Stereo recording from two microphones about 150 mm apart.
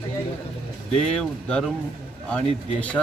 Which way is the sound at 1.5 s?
5° left (ahead or behind).